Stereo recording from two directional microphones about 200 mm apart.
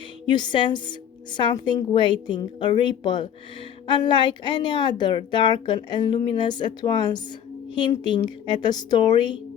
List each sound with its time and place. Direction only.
0.3 s a woman's voice: 20° left (ahead or behind)